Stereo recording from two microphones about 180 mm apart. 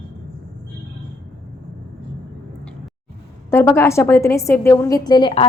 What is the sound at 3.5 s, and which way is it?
A woman's voice, 15° left (ahead or behind).